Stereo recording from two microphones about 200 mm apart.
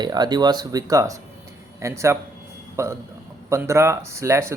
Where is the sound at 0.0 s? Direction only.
20° right (ahead or behind).